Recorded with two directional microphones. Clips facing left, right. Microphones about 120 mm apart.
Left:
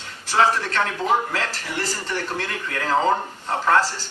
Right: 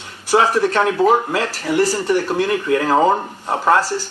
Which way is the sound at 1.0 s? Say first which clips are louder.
Right 9 dB; 40° right (ahead or behind).